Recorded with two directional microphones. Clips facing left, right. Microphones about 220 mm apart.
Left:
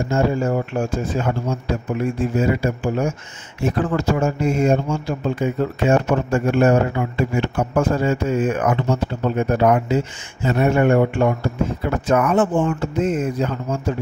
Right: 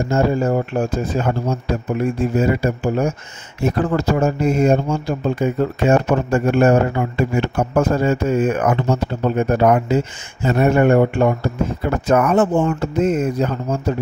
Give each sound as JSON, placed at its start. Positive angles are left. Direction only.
{"t": 0.1, "sound": "a man's voice", "side_deg": -35}
{"t": 12.1, "sound": "speech", "side_deg": -40}